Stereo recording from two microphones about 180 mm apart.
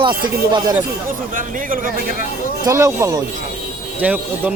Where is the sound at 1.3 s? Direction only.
50° right (ahead or behind).